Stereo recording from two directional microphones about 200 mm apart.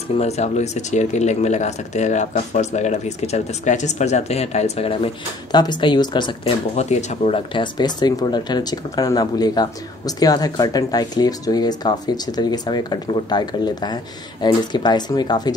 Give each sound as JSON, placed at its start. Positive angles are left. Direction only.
{"t": 0.2, "sound": "speech", "side_deg": 35}
{"t": 6.8, "sound": "speech", "side_deg": 35}